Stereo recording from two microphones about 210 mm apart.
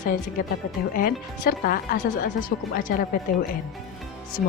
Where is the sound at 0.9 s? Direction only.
45° left (ahead or behind).